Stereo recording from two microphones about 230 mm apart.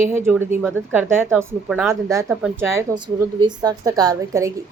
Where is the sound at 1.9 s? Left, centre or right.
Centre.